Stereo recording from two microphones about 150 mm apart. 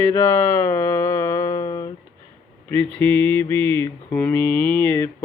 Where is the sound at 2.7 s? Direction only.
10° left (ahead or behind).